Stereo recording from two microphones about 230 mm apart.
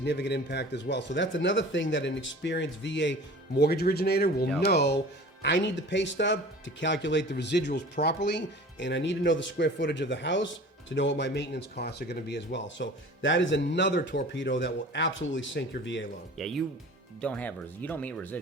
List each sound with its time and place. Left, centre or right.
0.0 s speech: left
16.4 s speech: centre